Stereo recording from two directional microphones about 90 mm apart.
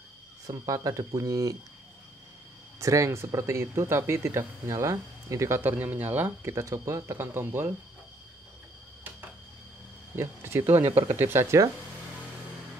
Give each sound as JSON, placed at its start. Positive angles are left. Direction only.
{"t": 0.5, "sound": "speech", "side_deg": -35}
{"t": 2.8, "sound": "speech", "side_deg": -35}
{"t": 5.6, "sound": "speech", "side_deg": -20}
{"t": 6.5, "sound": "speech", "side_deg": -35}
{"t": 10.1, "sound": "speech", "side_deg": -30}